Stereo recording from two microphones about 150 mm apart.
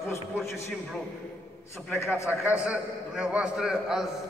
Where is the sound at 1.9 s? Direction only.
15° left (ahead or behind).